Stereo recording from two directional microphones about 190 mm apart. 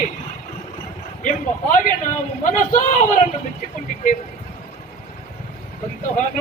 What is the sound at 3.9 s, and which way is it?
Vehicle, 45° left (ahead or behind).